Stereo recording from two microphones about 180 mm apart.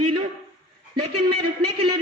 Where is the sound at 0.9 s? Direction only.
25° right (ahead or behind).